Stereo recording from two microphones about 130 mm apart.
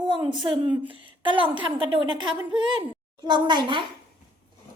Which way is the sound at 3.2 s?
35° right (ahead or behind).